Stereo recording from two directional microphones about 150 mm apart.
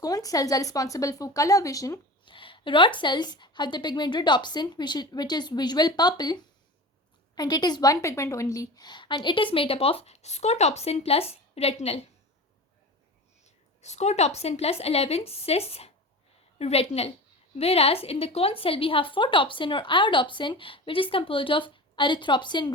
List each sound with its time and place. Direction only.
0.0 s a woman's voice: 25° left (ahead or behind)
2.3 s a woman's voice: 35° left (ahead or behind)
13.4 s a woman's voice: 50° left (ahead or behind); by 22.7 s 30° left (ahead or behind)